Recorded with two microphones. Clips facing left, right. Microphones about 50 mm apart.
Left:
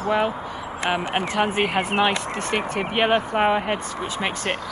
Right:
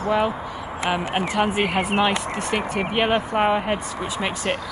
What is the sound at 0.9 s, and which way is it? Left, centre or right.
Speech, left.